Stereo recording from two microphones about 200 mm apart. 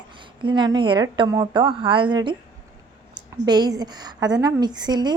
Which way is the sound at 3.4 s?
20° right (ahead or behind).